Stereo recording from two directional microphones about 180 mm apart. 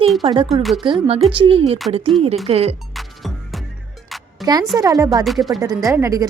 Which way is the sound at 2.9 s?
Centre (ahead or behind).